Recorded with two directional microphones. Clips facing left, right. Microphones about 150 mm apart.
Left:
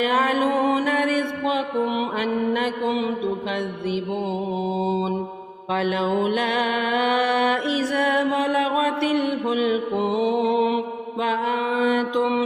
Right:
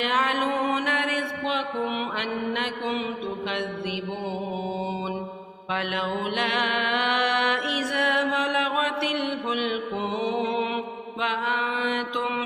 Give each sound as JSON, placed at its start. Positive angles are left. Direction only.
{"t": 0.0, "sound": "mantra", "side_deg": 40}